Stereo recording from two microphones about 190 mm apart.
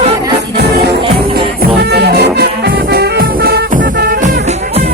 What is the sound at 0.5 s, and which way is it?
Music, 60° right (ahead or behind).